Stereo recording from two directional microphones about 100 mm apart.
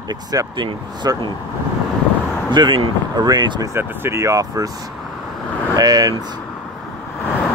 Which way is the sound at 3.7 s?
25° right (ahead or behind).